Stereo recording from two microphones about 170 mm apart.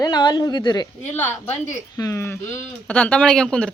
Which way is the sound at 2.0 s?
15° left (ahead or behind).